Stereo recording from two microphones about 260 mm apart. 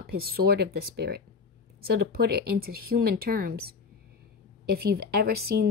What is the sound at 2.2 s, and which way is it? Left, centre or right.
Speech, right.